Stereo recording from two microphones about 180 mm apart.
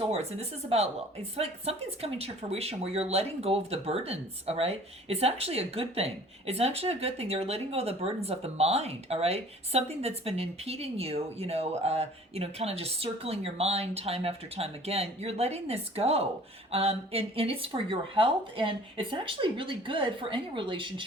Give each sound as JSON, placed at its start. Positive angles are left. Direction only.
{"t": 0.0, "sound": "speech", "side_deg": -35}